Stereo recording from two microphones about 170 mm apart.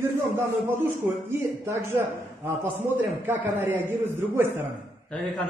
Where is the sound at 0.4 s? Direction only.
15° right (ahead or behind).